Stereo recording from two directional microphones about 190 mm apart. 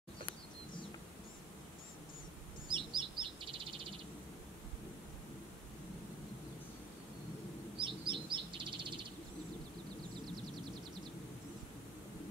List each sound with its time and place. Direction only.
2.7 s chirp: 25° right (ahead or behind)
7.7 s bird: 25° right (ahead or behind)